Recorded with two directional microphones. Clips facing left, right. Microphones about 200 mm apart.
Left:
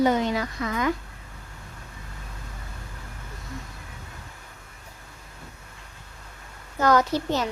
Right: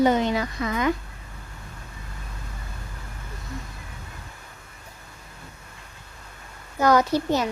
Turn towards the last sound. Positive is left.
turn(degrees=-10)  # may be behind; listen again after turning